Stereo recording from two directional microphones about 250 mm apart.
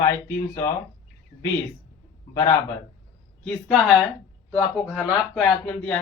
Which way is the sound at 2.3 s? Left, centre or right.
Centre.